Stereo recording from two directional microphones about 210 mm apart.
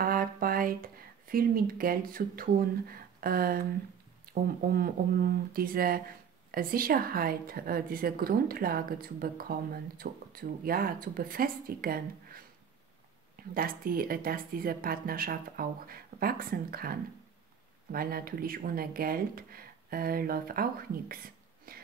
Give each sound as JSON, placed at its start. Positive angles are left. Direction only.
{"t": 0.0, "sound": "a woman's voice", "side_deg": -45}
{"t": 13.4, "sound": "a woman's voice", "side_deg": -45}
{"t": 21.7, "sound": "a sound", "side_deg": -45}